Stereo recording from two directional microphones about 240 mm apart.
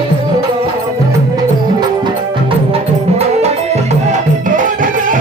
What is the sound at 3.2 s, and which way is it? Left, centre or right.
Music, right.